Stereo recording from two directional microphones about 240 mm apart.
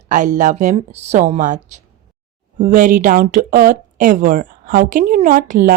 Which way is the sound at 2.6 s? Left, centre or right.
Right.